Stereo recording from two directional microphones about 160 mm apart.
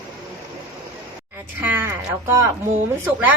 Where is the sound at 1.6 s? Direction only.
10° right (ahead or behind).